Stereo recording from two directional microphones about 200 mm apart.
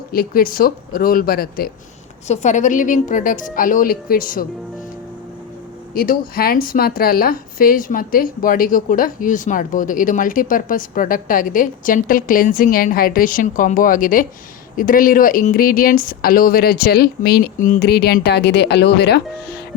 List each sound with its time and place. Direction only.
0.1 s a woman's voice: 45° left (ahead or behind)
2.2 s a woman's voice: 35° left (ahead or behind)
5.9 s a woman's voice: 45° left (ahead or behind)